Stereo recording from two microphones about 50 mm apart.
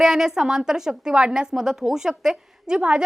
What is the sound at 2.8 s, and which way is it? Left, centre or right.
Speech, right.